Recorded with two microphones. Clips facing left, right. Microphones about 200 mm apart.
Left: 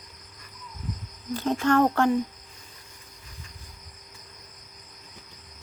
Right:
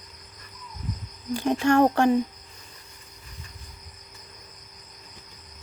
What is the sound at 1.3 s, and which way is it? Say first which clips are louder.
Speech: right 2 dB; 15° right (ahead or behind).